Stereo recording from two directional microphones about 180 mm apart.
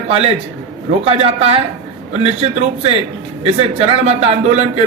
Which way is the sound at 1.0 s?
35° right (ahead or behind).